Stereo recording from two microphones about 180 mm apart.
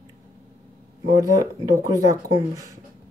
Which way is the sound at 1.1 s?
20° right (ahead or behind).